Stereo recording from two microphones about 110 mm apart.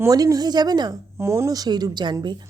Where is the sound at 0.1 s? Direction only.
35° right (ahead or behind).